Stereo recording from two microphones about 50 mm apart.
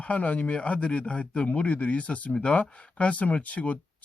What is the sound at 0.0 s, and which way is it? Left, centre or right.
Speech, left.